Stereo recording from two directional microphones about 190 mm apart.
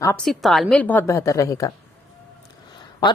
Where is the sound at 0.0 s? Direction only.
5° left (ahead or behind).